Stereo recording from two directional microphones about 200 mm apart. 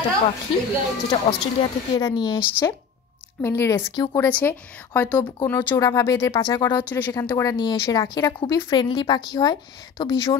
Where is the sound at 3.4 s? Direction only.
10° left (ahead or behind).